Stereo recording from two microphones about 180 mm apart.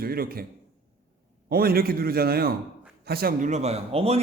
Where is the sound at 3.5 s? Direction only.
35° right (ahead or behind).